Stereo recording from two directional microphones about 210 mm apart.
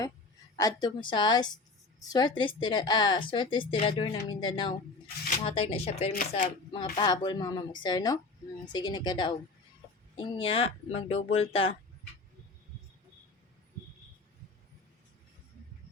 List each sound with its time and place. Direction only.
0.5 s a woman's voice: 20° left (ahead or behind)
6.1 s speech: 40° left (ahead or behind)
6.9 s speech: 20° left (ahead or behind)